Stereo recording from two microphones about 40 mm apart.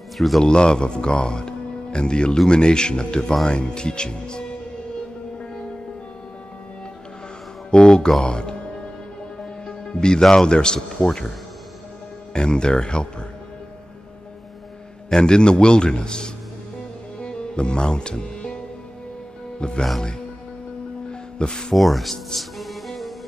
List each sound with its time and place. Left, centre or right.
0.4 s a man's voice: left
7.7 s mantra: left
8.2 s a man's voice: left
9.4 s music: centre
10.3 s a man's voice: centre
12.4 s a man's voice: left
15.0 s a man's voice: centre
17.2 s music: left
19.6 s a man's voice: left
21.1 s music: centre
21.7 s speech: centre
22.4 s music: centre